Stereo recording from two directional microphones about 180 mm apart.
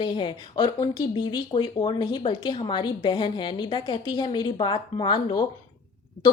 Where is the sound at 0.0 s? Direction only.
25° left (ahead or behind).